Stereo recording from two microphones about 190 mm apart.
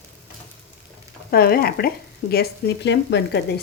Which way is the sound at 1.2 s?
50° left (ahead or behind).